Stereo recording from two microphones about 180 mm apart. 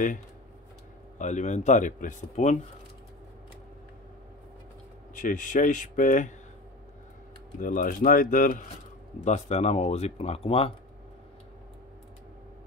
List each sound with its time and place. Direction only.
1.1 s speech: 40° left (ahead or behind)
5.1 s speech: 45° left (ahead or behind)
7.5 s speech: 50° left (ahead or behind)
9.2 s speech: 40° left (ahead or behind)